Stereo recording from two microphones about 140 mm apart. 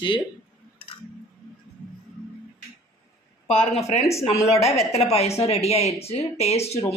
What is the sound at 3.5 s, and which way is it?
A woman's voice, 45° left (ahead or behind).